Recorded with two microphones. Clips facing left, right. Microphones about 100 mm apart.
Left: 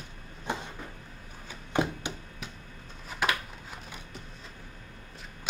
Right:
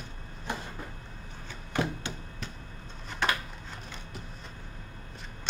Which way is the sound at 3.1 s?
5° left (ahead or behind).